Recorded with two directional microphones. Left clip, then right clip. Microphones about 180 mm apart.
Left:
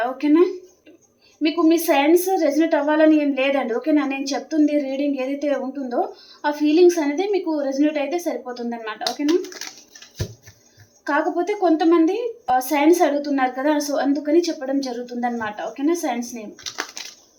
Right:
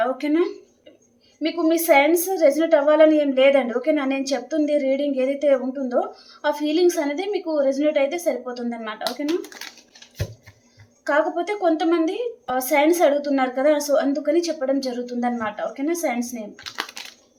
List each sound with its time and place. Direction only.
0.2 s a woman's voice: 20° right (ahead or behind)
11.0 s a woman's voice: 20° right (ahead or behind)
17.0 s typing: 20° right (ahead or behind)